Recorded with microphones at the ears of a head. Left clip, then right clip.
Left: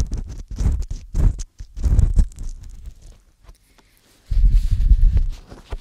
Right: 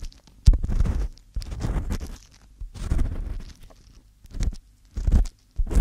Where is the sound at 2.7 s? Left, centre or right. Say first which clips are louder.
Right 17 dB; right.